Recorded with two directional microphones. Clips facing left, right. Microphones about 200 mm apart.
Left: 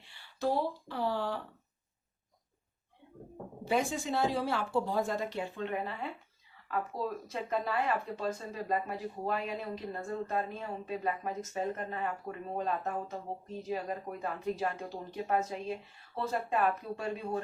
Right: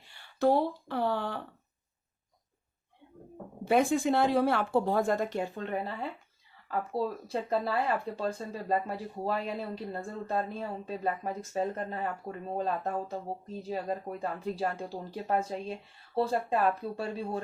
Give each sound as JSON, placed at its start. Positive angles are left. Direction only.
{"t": 0.0, "sound": "speech", "side_deg": -50}
{"t": 3.6, "sound": "speech", "side_deg": -55}